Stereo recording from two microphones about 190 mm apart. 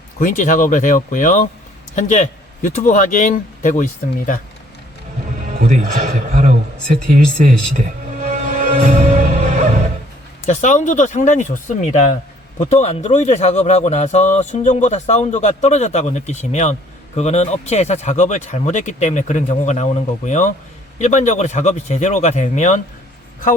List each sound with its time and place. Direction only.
0.2 s speech: 40° left (ahead or behind)
5.6 s a man's voice: 40° right (ahead or behind)
8.2 s music: 40° right (ahead or behind)
10.4 s speech: 40° left (ahead or behind)